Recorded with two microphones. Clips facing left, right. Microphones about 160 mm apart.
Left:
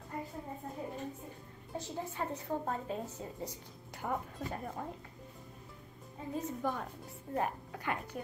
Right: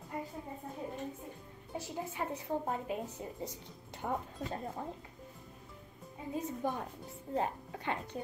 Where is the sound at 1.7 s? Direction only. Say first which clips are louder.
Even; 10° right (ahead or behind).